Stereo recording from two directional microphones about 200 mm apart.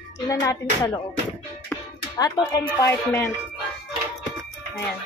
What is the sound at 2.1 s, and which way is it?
Speech, 20° left (ahead or behind).